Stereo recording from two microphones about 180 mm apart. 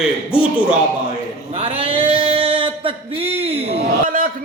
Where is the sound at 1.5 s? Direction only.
30° right (ahead or behind).